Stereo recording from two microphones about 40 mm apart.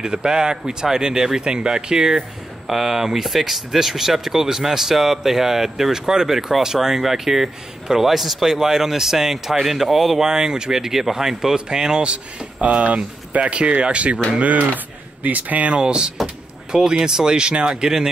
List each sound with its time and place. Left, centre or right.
0.0 s speech: centre
2.7 s speech: centre
10.2 s speech: centre
12.0 s speech: right
15.2 s speech: right
15.8 s speech: right